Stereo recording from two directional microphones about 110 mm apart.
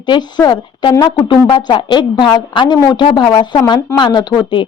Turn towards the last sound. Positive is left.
turn(degrees=40)  # may be behind; listen again after turning